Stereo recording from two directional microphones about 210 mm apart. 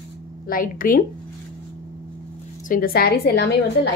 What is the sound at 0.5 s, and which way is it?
Speech, 40° left (ahead or behind).